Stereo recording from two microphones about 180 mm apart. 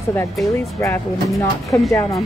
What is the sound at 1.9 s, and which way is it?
Speech, 15° left (ahead or behind).